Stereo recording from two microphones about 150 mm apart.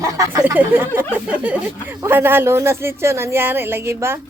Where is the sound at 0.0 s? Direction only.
25° right (ahead or behind).